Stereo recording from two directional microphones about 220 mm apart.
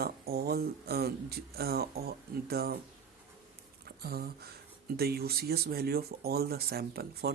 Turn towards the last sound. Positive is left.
turn(degrees=-45)  # may be behind; listen again after turning